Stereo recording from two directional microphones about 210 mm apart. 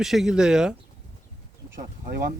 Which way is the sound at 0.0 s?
Centre (ahead or behind).